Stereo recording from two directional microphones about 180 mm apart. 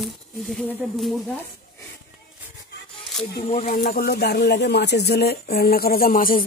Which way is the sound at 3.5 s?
40° left (ahead or behind).